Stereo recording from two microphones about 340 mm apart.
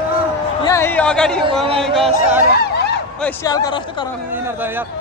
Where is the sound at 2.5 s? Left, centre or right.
Left.